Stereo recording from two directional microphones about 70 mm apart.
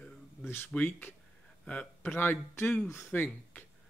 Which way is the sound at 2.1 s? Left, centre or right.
Left.